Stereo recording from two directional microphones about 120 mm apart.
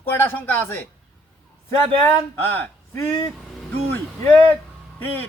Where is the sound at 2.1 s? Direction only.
15° left (ahead or behind).